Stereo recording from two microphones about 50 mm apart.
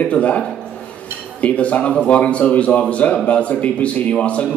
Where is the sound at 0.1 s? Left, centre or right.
Left.